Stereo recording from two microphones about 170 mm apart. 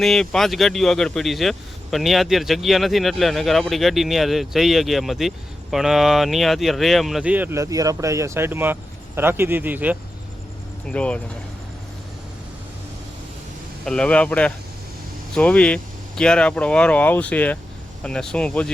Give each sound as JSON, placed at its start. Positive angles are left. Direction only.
{"t": 0.0, "sound": "speech", "side_deg": 0}
{"t": 10.8, "sound": "speech", "side_deg": 5}
{"t": 13.8, "sound": "speech", "side_deg": 5}